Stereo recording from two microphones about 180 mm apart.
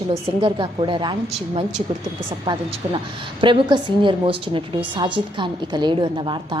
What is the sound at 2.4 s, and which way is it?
Speech, 25° right (ahead or behind).